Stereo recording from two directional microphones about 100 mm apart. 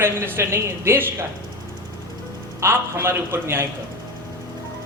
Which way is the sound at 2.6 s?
25° right (ahead or behind).